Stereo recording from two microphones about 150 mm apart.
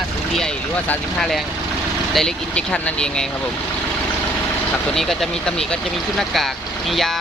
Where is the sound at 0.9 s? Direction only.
5° left (ahead or behind).